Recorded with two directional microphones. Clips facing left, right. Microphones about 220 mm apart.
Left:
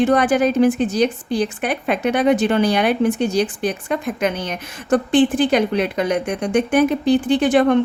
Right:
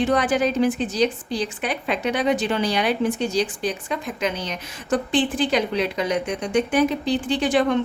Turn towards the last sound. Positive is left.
turn(degrees=55)  # may be behind; listen again after turning